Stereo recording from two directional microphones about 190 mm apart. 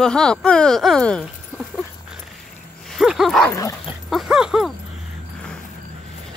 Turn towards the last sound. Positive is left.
turn(degrees=-5)  # may be behind; listen again after turning